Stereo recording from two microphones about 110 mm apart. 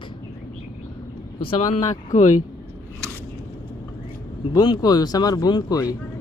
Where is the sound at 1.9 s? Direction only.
90° left.